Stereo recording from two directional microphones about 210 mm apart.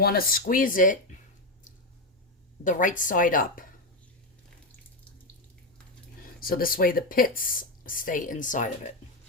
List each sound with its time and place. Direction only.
0.0 s speech: 45° left (ahead or behind)
2.6 s speech: 40° left (ahead or behind)
6.4 s speech: 45° left (ahead or behind)